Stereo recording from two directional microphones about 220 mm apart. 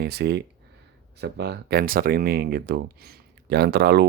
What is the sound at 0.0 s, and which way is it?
Speech, 45° right (ahead or behind).